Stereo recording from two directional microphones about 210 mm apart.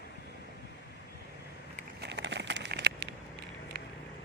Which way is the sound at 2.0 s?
55° right (ahead or behind).